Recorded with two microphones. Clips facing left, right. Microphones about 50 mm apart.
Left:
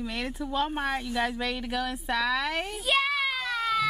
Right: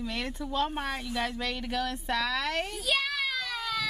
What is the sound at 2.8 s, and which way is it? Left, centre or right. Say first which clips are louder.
Child singing: left 6 dB; left.